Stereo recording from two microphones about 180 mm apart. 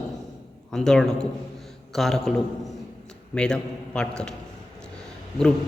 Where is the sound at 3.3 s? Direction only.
5° left (ahead or behind).